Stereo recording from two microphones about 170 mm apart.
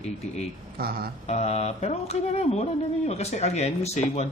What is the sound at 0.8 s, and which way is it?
Speech, 65° right (ahead or behind).